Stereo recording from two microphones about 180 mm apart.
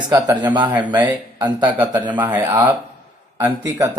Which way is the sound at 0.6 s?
10° right (ahead or behind).